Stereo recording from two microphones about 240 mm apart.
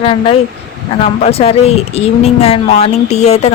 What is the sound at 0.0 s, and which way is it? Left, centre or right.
Speech, left.